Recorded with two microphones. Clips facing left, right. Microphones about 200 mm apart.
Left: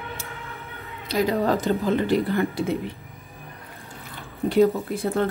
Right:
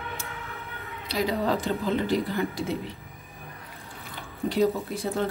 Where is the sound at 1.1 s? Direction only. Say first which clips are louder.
Left 4 dB; 50° left (ahead or behind).